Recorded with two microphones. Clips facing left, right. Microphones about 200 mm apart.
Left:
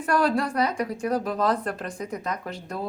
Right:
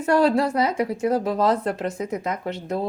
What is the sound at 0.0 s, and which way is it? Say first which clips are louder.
A woman's voice: right 5 dB; 25° right (ahead or behind).